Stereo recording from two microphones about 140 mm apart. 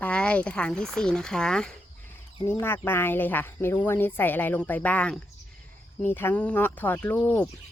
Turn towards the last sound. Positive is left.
turn(degrees=10)  # may be behind; listen again after turning